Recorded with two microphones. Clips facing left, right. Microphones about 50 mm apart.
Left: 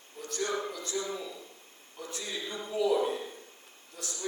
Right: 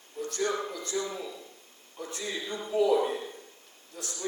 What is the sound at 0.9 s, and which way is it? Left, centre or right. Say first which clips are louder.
Speech: right 2 dB; centre.